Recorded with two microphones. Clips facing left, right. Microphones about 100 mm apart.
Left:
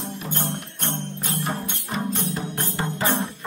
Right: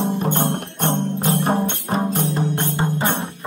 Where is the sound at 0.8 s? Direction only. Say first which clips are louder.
Right 11 dB; 50° right (ahead or behind).